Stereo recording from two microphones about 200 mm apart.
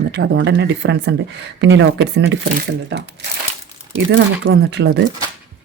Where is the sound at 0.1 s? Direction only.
60° right (ahead or behind).